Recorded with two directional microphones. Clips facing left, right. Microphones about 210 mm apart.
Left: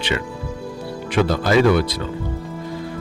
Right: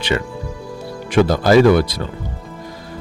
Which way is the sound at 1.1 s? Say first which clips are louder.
Right 5 dB; 40° right (ahead or behind).